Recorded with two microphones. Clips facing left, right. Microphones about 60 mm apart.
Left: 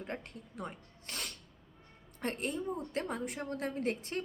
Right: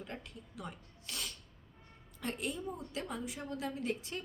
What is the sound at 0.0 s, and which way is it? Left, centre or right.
A woman's voice, left.